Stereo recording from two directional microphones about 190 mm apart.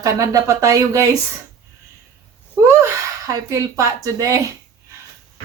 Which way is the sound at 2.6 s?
15° right (ahead or behind).